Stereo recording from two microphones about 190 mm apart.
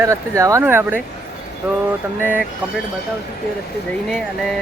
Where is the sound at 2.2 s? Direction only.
10° right (ahead or behind).